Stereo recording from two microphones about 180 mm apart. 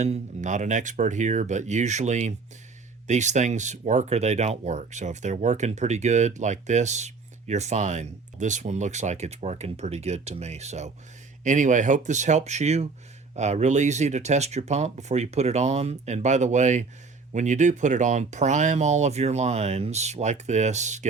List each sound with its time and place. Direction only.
0.0 s speech: 40° right (ahead or behind)